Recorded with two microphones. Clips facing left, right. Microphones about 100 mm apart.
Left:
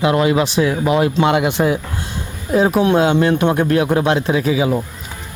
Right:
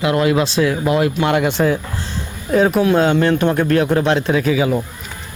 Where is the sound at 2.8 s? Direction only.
15° left (ahead or behind).